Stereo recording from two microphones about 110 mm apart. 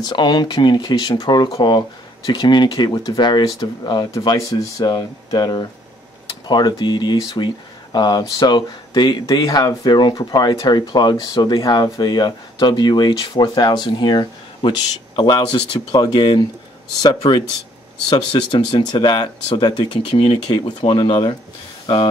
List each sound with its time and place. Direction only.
0.0 s speech: 45° left (ahead or behind)
18.5 s speech: 40° left (ahead or behind)